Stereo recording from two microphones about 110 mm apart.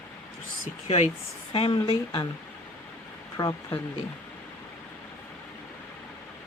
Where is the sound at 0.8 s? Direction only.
75° left (ahead or behind).